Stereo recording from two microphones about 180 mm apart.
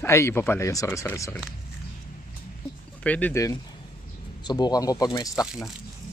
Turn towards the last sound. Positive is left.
turn(degrees=20)  # may be behind; listen again after turning